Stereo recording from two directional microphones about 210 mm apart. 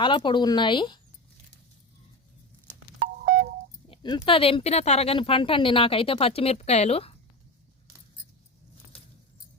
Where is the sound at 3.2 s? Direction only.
45° right (ahead or behind).